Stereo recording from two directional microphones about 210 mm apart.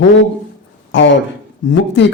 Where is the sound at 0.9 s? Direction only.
60° left (ahead or behind).